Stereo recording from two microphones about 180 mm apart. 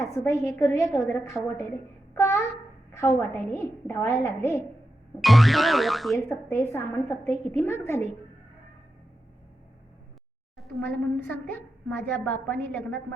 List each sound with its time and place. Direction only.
0.0 s a woman's voice: 15° left (ahead or behind)
2.1 s babbling: 15° left (ahead or behind)
2.9 s a woman's voice: 10° left (ahead or behind)
5.2 s speech: centre (ahead or behind)
6.2 s a woman's voice: 15° left (ahead or behind)
10.6 s a sound: centre (ahead or behind)
11.3 s a woman's voice: 10° left (ahead or behind)